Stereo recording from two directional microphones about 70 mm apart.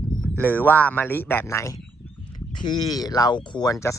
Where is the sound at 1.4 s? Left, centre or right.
Left.